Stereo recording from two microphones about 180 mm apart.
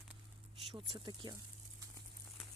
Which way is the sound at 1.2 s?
25° right (ahead or behind).